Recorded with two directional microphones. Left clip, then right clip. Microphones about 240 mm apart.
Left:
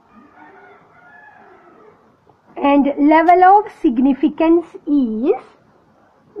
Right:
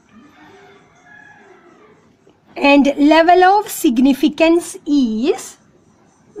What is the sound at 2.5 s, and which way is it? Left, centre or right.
A woman's voice, right.